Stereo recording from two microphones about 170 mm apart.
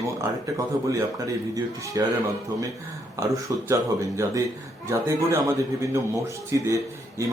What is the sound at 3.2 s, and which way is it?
A man's voice, 20° right (ahead or behind).